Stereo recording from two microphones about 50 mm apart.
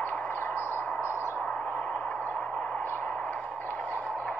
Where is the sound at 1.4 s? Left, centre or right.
Left.